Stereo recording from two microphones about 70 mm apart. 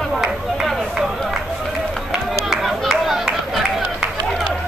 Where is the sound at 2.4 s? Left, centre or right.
Centre.